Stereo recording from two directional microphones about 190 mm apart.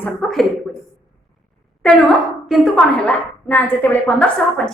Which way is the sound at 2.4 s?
Centre (ahead or behind).